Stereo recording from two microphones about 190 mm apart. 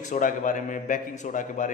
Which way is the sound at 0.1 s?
45° left (ahead or behind).